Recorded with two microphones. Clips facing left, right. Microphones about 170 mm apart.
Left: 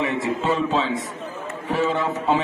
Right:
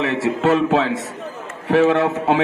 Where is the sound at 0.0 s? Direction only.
85° right.